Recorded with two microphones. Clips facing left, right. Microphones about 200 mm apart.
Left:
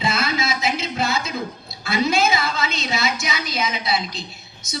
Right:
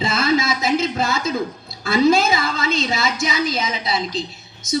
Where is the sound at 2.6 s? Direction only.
50° right (ahead or behind).